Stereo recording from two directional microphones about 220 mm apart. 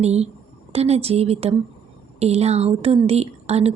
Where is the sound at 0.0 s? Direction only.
30° right (ahead or behind).